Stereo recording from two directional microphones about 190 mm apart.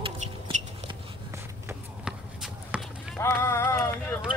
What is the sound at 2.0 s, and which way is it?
Basketball bounce, 5° right (ahead or behind).